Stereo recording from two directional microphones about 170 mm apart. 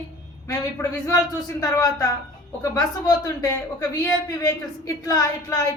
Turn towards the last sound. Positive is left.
turn(degrees=20)  # may be behind; listen again after turning